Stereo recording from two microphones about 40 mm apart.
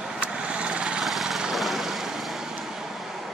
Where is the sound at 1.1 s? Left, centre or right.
Centre.